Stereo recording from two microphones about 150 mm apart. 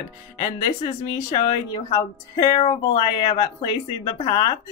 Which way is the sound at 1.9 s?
30° left (ahead or behind).